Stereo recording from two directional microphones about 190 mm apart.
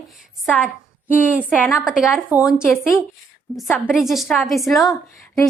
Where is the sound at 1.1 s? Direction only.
10° left (ahead or behind).